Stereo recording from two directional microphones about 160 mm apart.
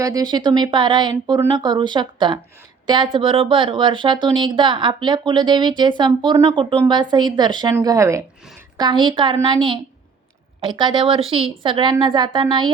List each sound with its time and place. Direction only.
0.0 s speech: 20° right (ahead or behind)